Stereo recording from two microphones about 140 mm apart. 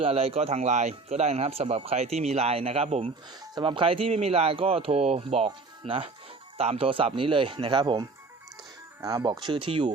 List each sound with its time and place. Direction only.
0.0 s speech: 45° right (ahead or behind)
9.0 s speech: 25° right (ahead or behind)